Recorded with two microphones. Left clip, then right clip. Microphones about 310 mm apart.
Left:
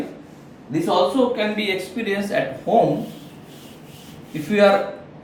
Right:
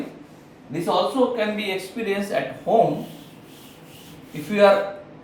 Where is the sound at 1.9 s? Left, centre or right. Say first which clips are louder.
Left 1 dB; centre.